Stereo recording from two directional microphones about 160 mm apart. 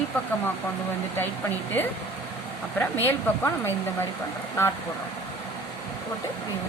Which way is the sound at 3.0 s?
15° left (ahead or behind).